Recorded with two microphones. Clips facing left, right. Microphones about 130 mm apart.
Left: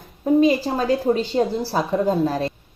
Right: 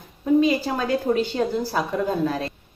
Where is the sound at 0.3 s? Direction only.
35° left (ahead or behind).